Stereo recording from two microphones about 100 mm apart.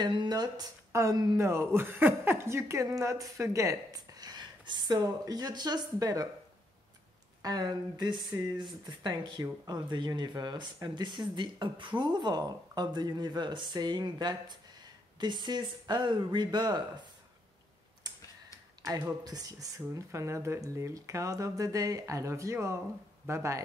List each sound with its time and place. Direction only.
0.0 s a woman's voice: 50° right (ahead or behind)
7.4 s speech: 40° right (ahead or behind)
18.8 s a woman's voice: 30° right (ahead or behind)